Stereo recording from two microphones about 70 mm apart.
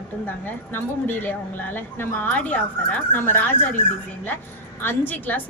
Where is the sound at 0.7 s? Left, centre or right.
Left.